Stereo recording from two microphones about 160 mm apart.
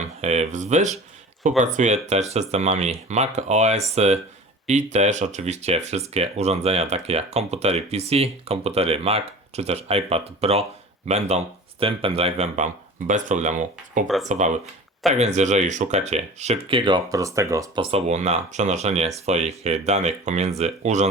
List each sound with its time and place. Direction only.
0.2 s speech: 45° right (ahead or behind); by 17.7 s 20° right (ahead or behind)
17.7 s speech: 40° right (ahead or behind)